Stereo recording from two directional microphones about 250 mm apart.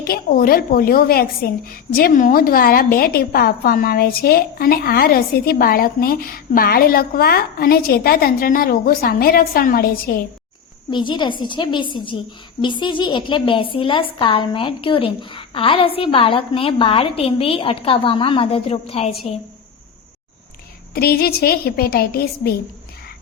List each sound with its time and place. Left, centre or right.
0.0 s a woman's voice: left
10.9 s a woman's voice: centre
20.9 s a woman's voice: left